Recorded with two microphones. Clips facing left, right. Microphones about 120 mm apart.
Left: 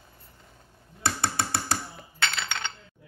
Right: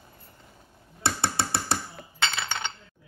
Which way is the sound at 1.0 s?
30° right (ahead or behind).